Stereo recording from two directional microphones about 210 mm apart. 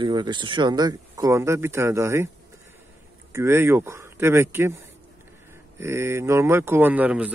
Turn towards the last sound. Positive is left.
turn(degrees=-5)  # may be behind; listen again after turning